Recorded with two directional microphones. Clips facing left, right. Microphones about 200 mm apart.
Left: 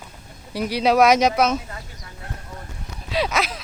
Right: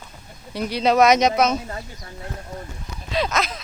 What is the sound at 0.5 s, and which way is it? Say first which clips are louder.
Speech: even; 10° left (ahead or behind).